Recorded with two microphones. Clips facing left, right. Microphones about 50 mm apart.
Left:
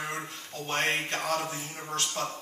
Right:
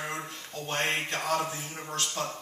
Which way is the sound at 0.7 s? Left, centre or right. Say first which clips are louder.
Left 1 dB; left.